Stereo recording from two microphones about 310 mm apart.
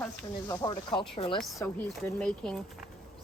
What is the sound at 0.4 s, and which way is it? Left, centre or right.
Speech, centre.